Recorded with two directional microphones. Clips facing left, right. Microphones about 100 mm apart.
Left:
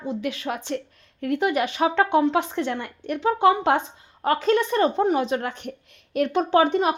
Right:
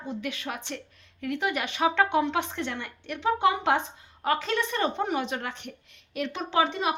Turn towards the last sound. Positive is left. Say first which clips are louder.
# left 6 dB
turn(degrees=45)  # may be behind; listen again after turning